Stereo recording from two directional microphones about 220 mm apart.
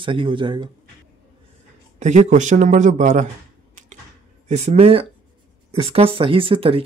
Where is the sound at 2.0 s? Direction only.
30° right (ahead or behind).